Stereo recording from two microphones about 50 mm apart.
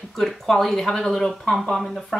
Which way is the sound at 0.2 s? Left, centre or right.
Centre.